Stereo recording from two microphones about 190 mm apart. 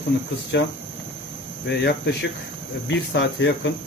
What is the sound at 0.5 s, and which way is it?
Speech, 65° left (ahead or behind).